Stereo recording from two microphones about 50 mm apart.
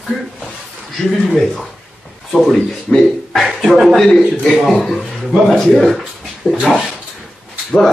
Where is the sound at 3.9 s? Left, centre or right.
Centre.